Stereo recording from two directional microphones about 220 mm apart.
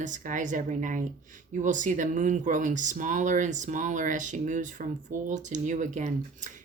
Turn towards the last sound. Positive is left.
turn(degrees=-35)  # may be behind; listen again after turning